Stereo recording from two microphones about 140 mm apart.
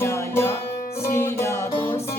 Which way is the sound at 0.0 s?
20° left (ahead or behind).